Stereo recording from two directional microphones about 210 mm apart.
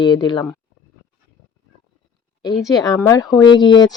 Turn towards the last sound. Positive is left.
turn(degrees=20)  # may be behind; listen again after turning